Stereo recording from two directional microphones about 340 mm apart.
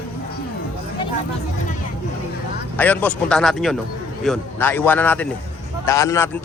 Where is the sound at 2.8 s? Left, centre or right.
Centre.